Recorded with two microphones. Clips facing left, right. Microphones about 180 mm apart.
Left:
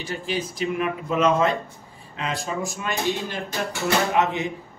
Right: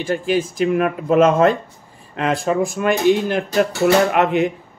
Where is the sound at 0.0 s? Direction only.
50° right (ahead or behind).